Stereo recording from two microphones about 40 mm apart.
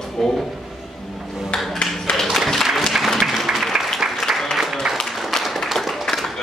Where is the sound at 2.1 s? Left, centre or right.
Left.